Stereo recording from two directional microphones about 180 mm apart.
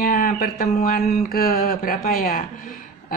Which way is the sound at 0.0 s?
50° left (ahead or behind).